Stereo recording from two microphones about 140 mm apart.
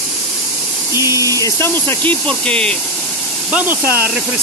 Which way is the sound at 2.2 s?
5° left (ahead or behind).